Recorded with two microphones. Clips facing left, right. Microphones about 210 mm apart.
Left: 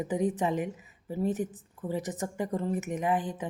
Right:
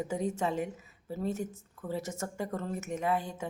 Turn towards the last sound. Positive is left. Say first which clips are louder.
# left 2 dB
turn(degrees=15)  # may be behind; listen again after turning